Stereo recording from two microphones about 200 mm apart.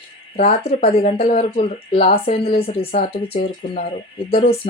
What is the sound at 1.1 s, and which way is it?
Speech, 40° left (ahead or behind).